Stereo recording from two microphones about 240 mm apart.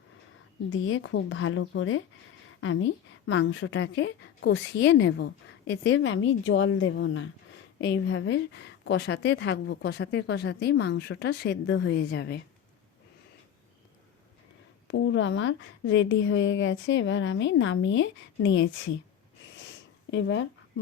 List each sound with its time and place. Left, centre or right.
0.7 s a woman's voice: left
14.8 s a woman's voice: left
19.5 s a sound: left